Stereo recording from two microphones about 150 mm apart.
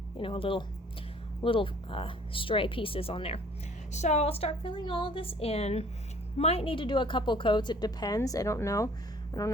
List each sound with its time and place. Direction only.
0.2 s a woman's voice: 35° left (ahead or behind); by 9.5 s 20° left (ahead or behind)